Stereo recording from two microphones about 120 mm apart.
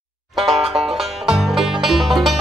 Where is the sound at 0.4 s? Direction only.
Centre (ahead or behind).